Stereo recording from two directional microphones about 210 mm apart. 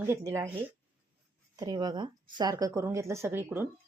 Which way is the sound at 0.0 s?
15° right (ahead or behind).